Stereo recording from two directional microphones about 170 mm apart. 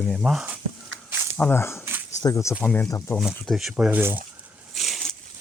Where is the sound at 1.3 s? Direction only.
10° left (ahead or behind).